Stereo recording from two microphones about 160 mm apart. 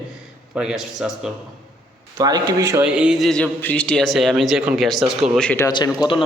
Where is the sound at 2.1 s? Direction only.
25° right (ahead or behind).